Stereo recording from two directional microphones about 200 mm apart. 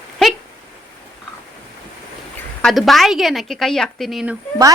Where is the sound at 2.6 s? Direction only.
Centre (ahead or behind).